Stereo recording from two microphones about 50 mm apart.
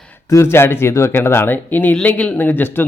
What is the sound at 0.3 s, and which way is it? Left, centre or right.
Speech, left.